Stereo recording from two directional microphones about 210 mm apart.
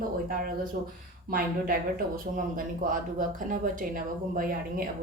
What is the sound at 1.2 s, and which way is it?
Speech, 45° right (ahead or behind).